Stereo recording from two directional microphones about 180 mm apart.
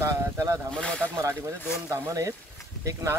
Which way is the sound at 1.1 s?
15° right (ahead or behind).